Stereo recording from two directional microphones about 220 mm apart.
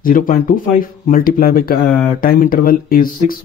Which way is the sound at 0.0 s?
40° left (ahead or behind).